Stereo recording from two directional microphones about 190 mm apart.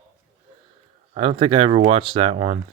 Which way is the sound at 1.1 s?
30° right (ahead or behind).